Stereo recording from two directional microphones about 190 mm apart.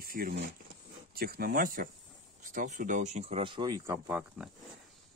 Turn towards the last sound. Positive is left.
turn(degrees=-10)  # may be behind; listen again after turning